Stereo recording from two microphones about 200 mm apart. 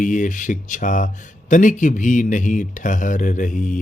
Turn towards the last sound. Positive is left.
turn(degrees=40)  # may be behind; listen again after turning